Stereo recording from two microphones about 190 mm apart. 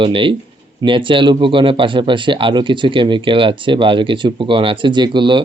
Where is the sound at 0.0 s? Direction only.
25° right (ahead or behind).